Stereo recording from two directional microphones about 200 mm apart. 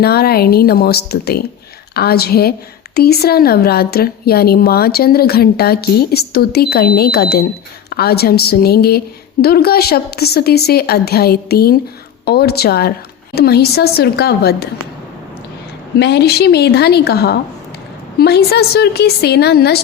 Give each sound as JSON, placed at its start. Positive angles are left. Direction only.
{"t": 0.0, "sound": "a woman's voice", "side_deg": 50}
{"t": 16.0, "sound": "a woman's voice", "side_deg": 55}